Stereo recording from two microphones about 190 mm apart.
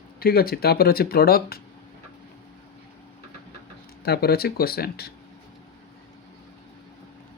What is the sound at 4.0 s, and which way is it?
Speech, 55° left (ahead or behind).